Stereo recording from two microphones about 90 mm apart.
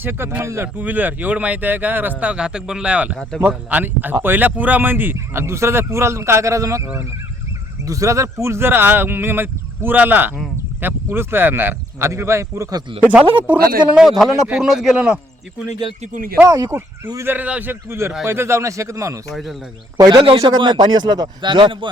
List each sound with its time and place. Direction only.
0.0 s a man's voice: 25° right (ahead or behind)
7.9 s a man's voice: 35° right (ahead or behind)
13.0 s speech: 20° right (ahead or behind)
13.9 s a man's voice: 5° right (ahead or behind)
16.5 s speech: 35° right (ahead or behind)
17.2 s a man's voice: 20° right (ahead or behind)
19.3 s a man's voice: centre (ahead or behind)
20.0 s a man's voice: 50° right (ahead or behind); by 21.8 s 65° right (ahead or behind)